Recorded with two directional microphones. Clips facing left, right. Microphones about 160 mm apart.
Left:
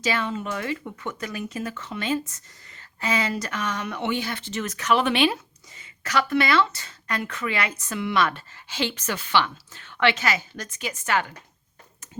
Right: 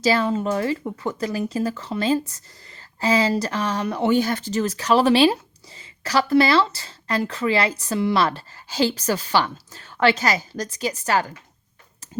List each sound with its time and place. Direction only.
0.0 s speech: 35° right (ahead or behind)